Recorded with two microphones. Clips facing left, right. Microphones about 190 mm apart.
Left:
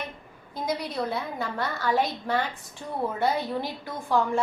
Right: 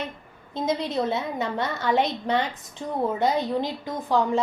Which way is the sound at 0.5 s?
25° right (ahead or behind).